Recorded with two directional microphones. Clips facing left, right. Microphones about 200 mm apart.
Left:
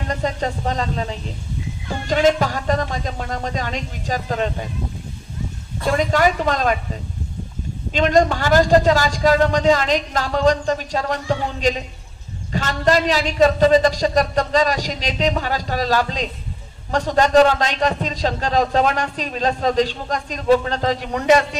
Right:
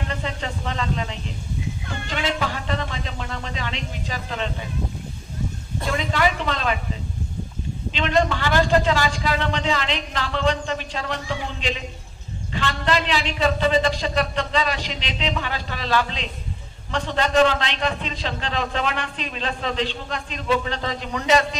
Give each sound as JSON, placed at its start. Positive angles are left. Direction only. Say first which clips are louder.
{"t": 0.1, "sound": "a man's voice", "louder": "left 6 dB", "side_deg": 40}
{"t": 1.9, "sound": "music", "louder": "left 11 dB", "side_deg": 45}
{"t": 5.9, "sound": "music", "louder": "left 6 dB", "side_deg": 45}
{"t": 7.9, "sound": "a man's voice", "louder": "left 5 dB", "side_deg": 45}